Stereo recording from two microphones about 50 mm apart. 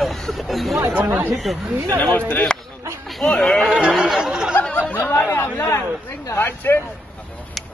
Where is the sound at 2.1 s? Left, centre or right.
Left.